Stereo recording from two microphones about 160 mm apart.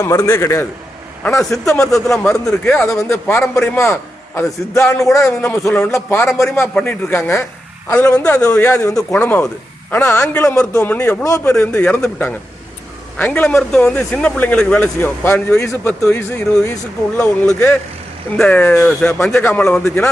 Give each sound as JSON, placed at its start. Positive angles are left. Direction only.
{"t": 0.0, "sound": "a man's voice", "side_deg": 20}
{"t": 1.4, "sound": "a man's voice", "side_deg": 0}